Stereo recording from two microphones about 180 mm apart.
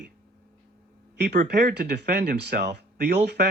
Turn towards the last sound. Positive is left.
turn(degrees=-65)  # may be behind; listen again after turning